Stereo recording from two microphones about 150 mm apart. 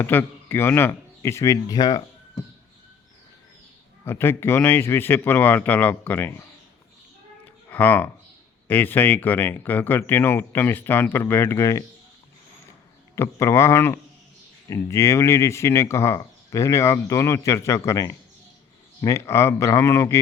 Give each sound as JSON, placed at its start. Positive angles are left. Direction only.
{"t": 0.0, "sound": "a man's voice", "side_deg": 15}
{"t": 4.0, "sound": "speech", "side_deg": 15}
{"t": 7.7, "sound": "speech", "side_deg": 10}
{"t": 13.1, "sound": "speech", "side_deg": 20}